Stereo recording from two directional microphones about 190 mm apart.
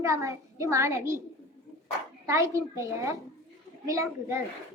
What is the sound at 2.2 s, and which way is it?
Speech, 15° right (ahead or behind).